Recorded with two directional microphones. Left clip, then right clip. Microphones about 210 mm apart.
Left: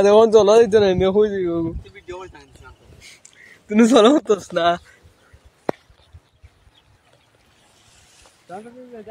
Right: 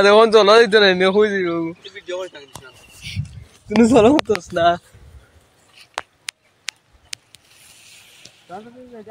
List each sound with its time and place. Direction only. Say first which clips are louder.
0.0 s a man's voice: right 1 dB; 25° left (ahead or behind)
2.0 s speech: right 7 dB; 60° left (ahead or behind)
3.6 s speech: even; 10° left (ahead or behind)
8.5 s speech: even; 10° left (ahead or behind)